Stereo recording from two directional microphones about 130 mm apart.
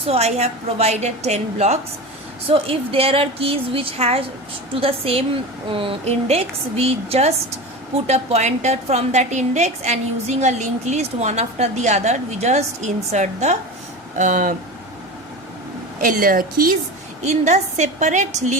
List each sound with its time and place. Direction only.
0.0 s a woman's voice: 55° right (ahead or behind)
14.2 s speech: 90° right
16.0 s speech: 90° right
17.2 s a woman's voice: 60° right (ahead or behind)